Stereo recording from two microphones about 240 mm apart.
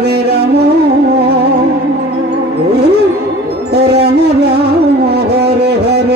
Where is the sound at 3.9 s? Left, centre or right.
Right.